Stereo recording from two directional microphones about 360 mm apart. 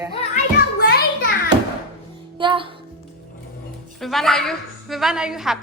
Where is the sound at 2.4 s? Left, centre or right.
Centre.